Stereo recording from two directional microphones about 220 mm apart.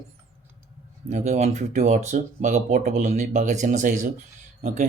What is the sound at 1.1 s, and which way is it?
Speech, 30° right (ahead or behind).